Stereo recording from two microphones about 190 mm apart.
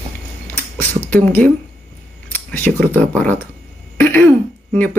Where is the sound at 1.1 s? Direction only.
10° left (ahead or behind).